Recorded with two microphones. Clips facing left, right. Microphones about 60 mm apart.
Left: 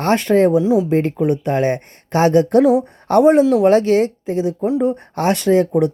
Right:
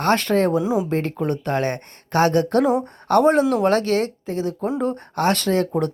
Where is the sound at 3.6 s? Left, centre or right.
Left.